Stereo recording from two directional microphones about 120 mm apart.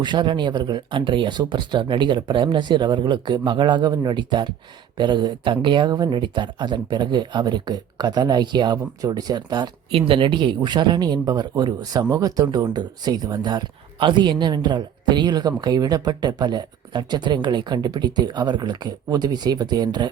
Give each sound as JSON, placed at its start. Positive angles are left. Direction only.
{"t": 0.0, "sound": "speech", "side_deg": -40}
{"t": 9.9, "sound": "speech", "side_deg": -45}